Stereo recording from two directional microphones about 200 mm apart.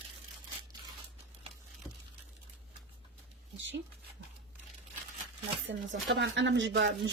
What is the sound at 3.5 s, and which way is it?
Dog, 65° right (ahead or behind).